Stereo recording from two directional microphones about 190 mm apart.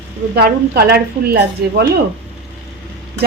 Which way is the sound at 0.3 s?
55° right (ahead or behind).